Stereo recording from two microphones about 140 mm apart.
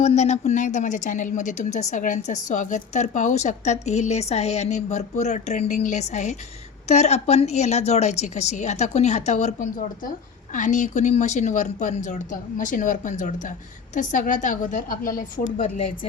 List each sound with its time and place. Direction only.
0.0 s a woman's voice: 55° left (ahead or behind); by 15.6 s 80° left